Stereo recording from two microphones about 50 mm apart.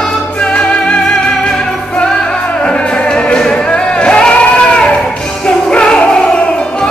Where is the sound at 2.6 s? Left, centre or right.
Centre.